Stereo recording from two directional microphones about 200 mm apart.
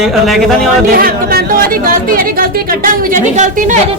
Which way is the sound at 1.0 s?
50° right (ahead or behind).